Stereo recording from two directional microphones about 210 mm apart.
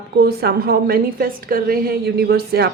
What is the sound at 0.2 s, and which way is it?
A woman's voice, 50° right (ahead or behind).